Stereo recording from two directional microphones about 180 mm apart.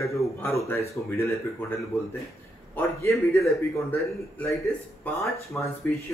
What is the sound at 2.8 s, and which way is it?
Speech, 10° left (ahead or behind).